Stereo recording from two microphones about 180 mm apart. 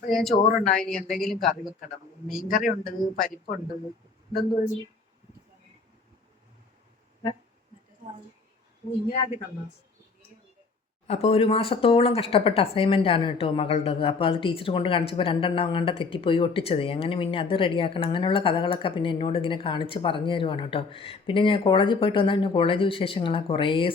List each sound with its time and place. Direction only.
0.1 s speech: centre (ahead or behind)
2.5 s a man's voice: 50° left (ahead or behind)
11.0 s speech: 35° left (ahead or behind)